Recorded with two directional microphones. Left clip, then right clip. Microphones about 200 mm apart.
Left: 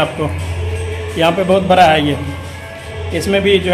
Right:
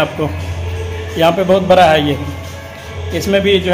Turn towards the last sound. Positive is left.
turn(degrees=-10)  # may be behind; listen again after turning